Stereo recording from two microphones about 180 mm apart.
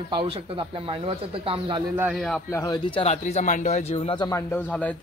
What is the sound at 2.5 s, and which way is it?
Speech, 20° left (ahead or behind).